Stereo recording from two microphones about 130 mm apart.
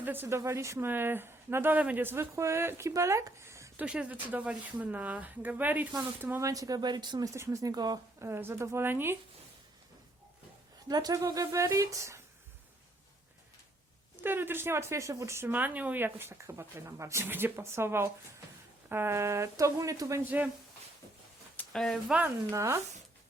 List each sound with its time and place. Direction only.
0.0 s speech: 15° right (ahead or behind)
3.8 s speech: 10° right (ahead or behind)
6.5 s speech: 25° right (ahead or behind)
8.3 s speech: 20° right (ahead or behind)
10.8 s speech: 30° right (ahead or behind)
14.2 s speech: 15° right (ahead or behind)
21.7 s speech: 5° left (ahead or behind)
22.4 s speech: 20° right (ahead or behind)